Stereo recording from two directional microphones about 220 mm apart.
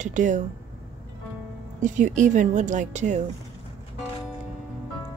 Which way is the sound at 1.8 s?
35° right (ahead or behind).